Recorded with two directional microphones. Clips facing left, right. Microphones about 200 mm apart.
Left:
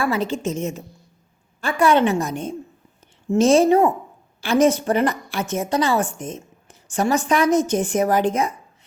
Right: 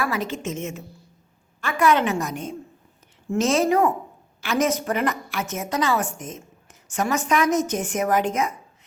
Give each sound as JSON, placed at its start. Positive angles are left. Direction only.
{"t": 0.0, "sound": "a woman's voice", "side_deg": 30}